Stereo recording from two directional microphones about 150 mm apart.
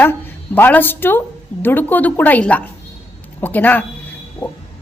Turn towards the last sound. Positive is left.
turn(degrees=15)  # may be behind; listen again after turning